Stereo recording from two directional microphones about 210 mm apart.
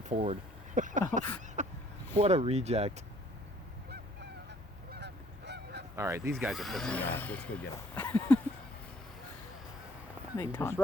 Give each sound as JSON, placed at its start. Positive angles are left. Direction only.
{"t": 0.0, "sound": "speech", "side_deg": -30}
{"t": 1.6, "sound": "a sound", "side_deg": -35}
{"t": 2.1, "sound": "speech", "side_deg": -30}
{"t": 4.9, "sound": "honk", "side_deg": -55}
{"t": 6.0, "sound": "speech", "side_deg": -15}
{"t": 6.3, "sound": "speech", "side_deg": 0}
{"t": 10.3, "sound": "speech", "side_deg": 15}